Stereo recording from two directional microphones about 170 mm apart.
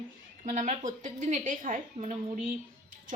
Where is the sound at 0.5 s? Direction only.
45° right (ahead or behind).